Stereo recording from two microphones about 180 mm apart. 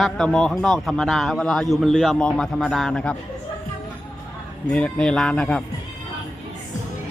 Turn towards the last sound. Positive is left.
turn(degrees=5)  # may be behind; listen again after turning